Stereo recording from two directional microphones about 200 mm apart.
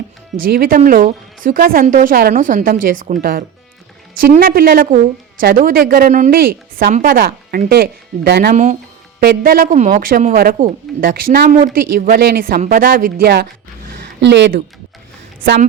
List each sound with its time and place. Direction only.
0.3 s a woman's voice: 45° right (ahead or behind)
14.2 s speech: 60° right (ahead or behind)